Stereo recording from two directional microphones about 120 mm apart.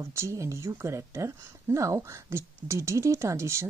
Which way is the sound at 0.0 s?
25° right (ahead or behind).